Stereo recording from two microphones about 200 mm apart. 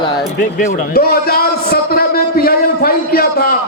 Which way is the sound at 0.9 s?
50° left (ahead or behind).